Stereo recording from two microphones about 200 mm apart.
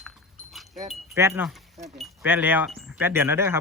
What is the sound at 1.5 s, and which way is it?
Speech, centre (ahead or behind).